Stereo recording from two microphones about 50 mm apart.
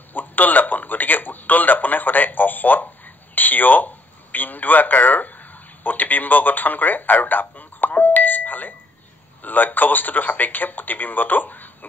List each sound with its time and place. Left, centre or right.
0.1 s a man's voice: left